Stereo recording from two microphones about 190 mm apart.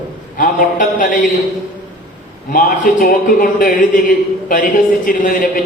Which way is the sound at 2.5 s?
45° left (ahead or behind).